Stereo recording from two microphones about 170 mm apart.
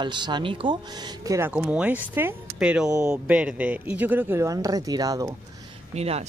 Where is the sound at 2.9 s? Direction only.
20° right (ahead or behind).